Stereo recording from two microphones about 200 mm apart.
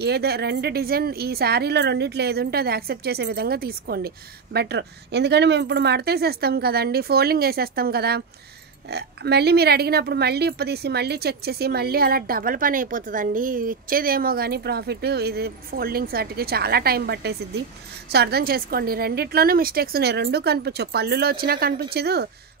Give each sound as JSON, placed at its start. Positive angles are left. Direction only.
{"t": 0.0, "sound": "speech", "side_deg": -55}